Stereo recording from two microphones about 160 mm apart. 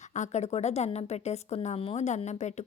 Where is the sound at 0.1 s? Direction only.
45° left (ahead or behind).